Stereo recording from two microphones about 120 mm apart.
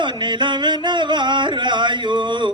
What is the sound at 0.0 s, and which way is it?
Music, 40° right (ahead or behind).